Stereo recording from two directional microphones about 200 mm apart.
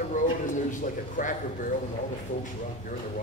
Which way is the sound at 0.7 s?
40° left (ahead or behind).